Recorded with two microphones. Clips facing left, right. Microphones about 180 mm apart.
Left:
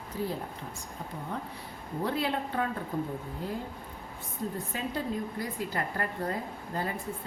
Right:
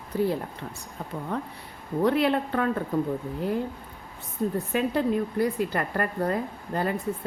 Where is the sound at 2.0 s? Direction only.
70° right (ahead or behind).